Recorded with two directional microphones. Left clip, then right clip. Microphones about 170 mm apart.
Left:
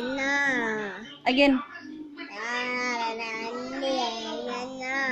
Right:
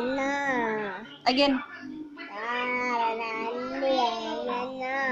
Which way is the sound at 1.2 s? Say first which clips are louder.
Left 1 dB; 50° left (ahead or behind).